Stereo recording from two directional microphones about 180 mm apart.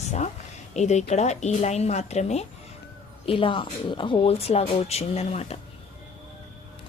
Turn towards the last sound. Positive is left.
turn(degrees=35)  # may be behind; listen again after turning